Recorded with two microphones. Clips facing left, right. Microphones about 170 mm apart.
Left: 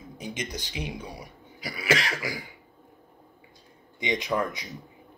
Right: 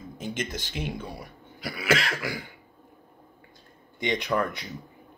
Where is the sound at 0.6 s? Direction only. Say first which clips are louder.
Right 1 dB; 15° left (ahead or behind).